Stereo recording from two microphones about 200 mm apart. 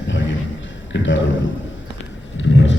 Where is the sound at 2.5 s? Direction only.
70° left (ahead or behind).